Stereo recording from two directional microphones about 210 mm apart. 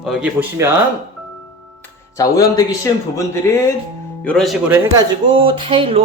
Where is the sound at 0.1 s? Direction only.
5° right (ahead or behind).